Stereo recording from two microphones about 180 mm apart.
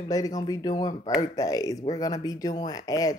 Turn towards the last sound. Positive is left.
turn(degrees=20)  # may be behind; listen again after turning